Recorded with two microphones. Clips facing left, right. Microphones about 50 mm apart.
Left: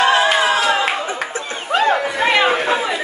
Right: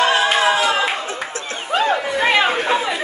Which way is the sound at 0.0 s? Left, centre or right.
Centre.